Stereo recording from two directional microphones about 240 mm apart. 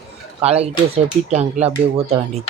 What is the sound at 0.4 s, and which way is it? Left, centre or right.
Speech, right.